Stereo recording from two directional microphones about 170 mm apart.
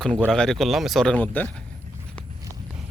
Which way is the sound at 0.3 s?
Centre (ahead or behind).